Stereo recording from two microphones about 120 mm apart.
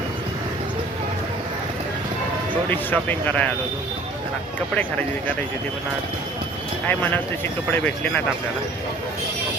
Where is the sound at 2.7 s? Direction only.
15° left (ahead or behind).